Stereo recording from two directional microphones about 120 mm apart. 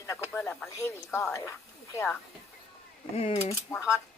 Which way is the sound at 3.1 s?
55° left (ahead or behind).